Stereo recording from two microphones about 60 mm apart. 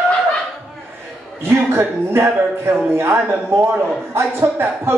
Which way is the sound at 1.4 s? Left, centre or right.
Right.